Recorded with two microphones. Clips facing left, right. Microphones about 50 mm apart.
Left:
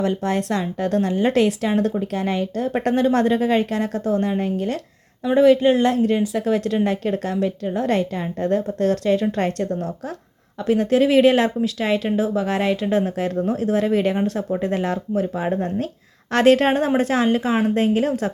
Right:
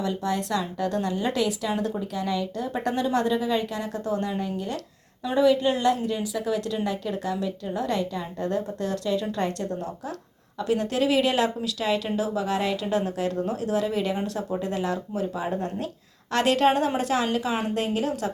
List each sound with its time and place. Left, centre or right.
0.0 s speech: left